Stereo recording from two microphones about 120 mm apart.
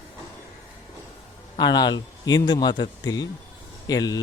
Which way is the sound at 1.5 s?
35° left (ahead or behind).